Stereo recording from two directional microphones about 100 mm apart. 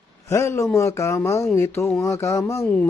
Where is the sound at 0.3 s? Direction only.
30° left (ahead or behind).